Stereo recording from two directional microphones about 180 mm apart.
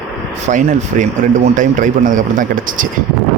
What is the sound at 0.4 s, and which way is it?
A man's voice, 45° right (ahead or behind).